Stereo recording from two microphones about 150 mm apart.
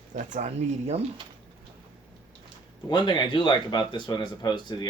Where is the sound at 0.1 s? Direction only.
55° right (ahead or behind).